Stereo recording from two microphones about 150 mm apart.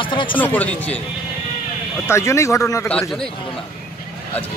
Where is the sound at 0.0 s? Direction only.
35° left (ahead or behind).